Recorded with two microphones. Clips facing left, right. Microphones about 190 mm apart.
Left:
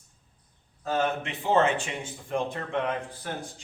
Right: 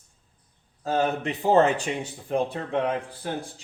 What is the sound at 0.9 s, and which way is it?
A man's voice, 35° right (ahead or behind).